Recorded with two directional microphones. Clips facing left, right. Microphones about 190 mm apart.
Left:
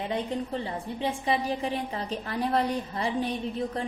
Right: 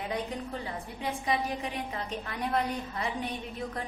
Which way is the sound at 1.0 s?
30° left (ahead or behind).